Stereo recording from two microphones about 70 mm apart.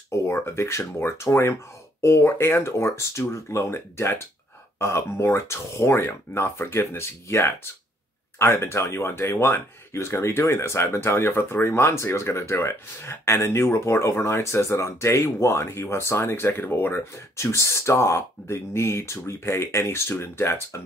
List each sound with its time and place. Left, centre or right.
0.1 s speech: left